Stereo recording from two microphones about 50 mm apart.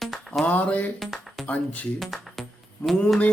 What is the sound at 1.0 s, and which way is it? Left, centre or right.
Music, centre.